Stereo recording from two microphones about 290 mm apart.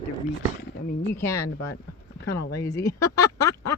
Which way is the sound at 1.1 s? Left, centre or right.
Centre.